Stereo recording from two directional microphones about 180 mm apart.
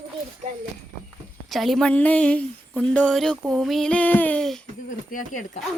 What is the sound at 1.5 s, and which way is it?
Speech, centre (ahead or behind).